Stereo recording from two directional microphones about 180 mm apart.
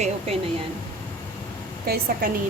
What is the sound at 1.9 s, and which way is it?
Speech, 60° right (ahead or behind).